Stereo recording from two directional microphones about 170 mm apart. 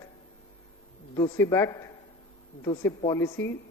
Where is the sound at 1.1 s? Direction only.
20° left (ahead or behind).